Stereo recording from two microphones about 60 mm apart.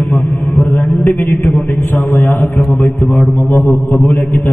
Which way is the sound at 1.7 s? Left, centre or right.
Left.